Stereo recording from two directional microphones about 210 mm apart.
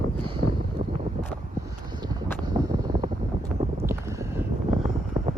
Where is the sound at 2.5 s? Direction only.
15° right (ahead or behind).